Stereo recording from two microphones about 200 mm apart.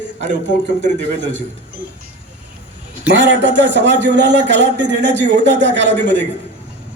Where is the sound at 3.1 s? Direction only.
60° right (ahead or behind).